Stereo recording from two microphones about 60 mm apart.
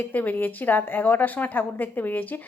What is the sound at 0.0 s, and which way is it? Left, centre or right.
A woman's voice, left.